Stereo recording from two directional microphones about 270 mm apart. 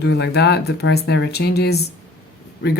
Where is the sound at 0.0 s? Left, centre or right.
Left.